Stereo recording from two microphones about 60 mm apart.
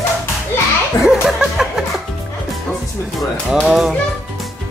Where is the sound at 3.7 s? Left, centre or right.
Centre.